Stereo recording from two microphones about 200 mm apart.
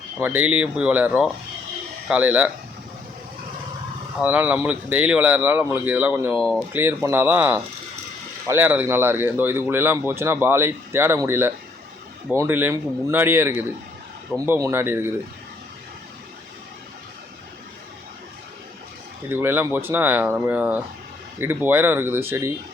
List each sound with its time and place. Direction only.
0.2 s speech: 5° right (ahead or behind)
4.2 s speech: 5° right (ahead or behind)
6.7 s speech: 10° right (ahead or behind)
19.3 s speech: 10° right (ahead or behind)